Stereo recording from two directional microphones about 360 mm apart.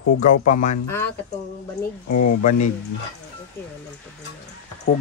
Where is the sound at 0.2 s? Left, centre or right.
Left.